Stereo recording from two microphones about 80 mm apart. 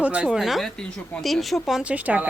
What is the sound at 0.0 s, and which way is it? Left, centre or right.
Speech, centre.